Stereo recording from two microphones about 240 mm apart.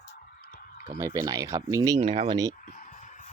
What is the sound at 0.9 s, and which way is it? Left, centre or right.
Speech, centre.